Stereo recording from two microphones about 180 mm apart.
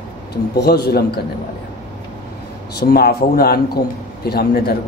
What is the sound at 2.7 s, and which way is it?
Speech, 60° left (ahead or behind).